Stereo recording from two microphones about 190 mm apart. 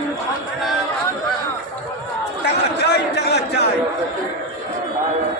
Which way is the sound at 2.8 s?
60° left (ahead or behind).